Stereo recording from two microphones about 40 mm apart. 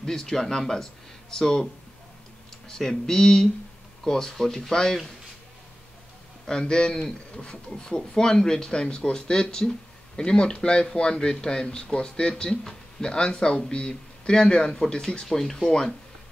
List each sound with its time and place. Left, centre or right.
0.0 s speech: centre
2.7 s speech: centre
6.4 s speech: centre
15.2 s speech: centre